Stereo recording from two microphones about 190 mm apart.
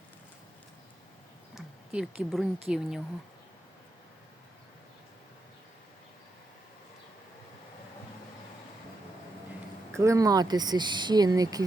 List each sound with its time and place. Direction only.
1.5 s speech: 5° right (ahead or behind)
10.0 s speech: 15° right (ahead or behind)